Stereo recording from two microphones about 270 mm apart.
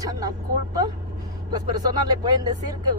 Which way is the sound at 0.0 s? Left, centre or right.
Centre.